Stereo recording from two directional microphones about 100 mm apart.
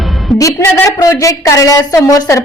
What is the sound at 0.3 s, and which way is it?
A woman's voice, 30° left (ahead or behind).